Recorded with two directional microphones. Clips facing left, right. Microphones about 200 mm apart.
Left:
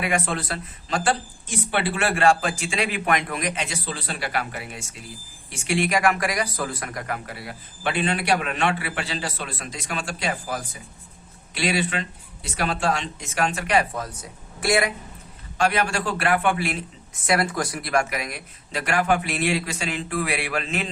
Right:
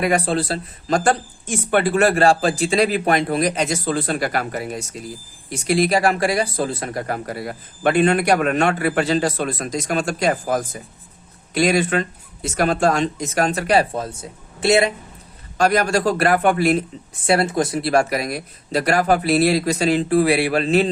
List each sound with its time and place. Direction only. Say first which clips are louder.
0.0 s speech: right 6 dB; 35° right (ahead or behind)
15.5 s speech: right 5 dB; 40° right (ahead or behind)
17.2 s speech: right 5 dB; 25° right (ahead or behind)